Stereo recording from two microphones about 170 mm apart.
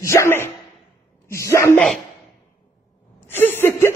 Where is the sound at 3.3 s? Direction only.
10° left (ahead or behind).